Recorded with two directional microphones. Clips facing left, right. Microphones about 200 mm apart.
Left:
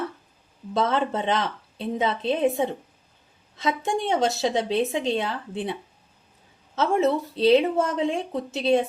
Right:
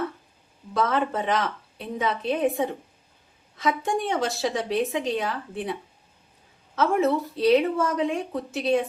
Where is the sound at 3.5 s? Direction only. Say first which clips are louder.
Even; 25° left (ahead or behind).